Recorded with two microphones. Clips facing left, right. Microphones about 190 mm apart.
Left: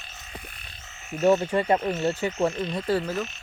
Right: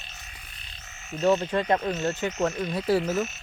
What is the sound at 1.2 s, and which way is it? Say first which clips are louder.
Speech: left 2 dB; 15° left (ahead or behind).